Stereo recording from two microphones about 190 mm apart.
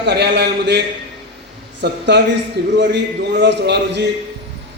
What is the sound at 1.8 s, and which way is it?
A man's voice, 65° right (ahead or behind).